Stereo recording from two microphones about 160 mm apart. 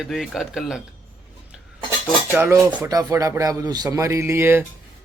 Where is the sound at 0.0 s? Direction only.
Centre (ahead or behind).